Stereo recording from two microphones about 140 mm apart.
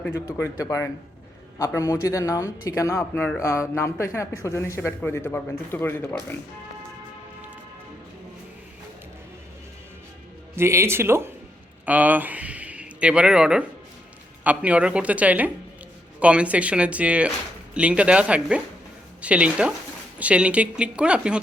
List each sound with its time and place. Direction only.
0.3 s a man's voice: 20° left (ahead or behind)
3.0 s speech: 10° left (ahead or behind)
3.4 s a man's voice: 20° left (ahead or behind)
10.5 s speech: 20° right (ahead or behind)